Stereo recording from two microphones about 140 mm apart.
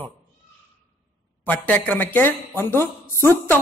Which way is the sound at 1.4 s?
10° left (ahead or behind).